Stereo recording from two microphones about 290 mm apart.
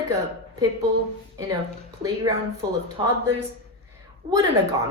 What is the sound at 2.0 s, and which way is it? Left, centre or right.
A woman's voice, centre.